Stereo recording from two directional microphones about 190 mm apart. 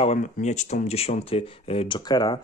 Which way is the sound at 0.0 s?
35° left (ahead or behind).